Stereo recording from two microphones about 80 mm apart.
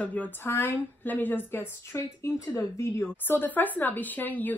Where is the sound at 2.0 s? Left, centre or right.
Left.